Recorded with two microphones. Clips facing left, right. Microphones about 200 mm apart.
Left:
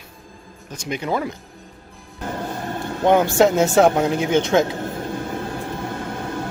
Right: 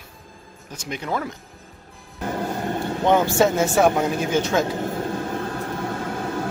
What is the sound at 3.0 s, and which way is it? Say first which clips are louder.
Speech: left 3 dB; 15° left (ahead or behind).